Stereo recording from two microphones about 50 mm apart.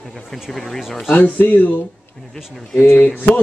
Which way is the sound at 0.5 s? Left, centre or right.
Centre.